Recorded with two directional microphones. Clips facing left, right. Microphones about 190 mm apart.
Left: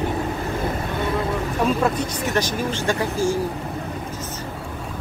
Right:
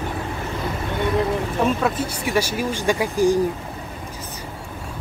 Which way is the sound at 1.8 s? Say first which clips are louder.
Left 1 dB; 5° right (ahead or behind).